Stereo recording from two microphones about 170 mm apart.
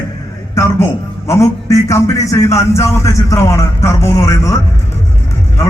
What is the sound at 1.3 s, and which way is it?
A man's voice, 15° left (ahead or behind).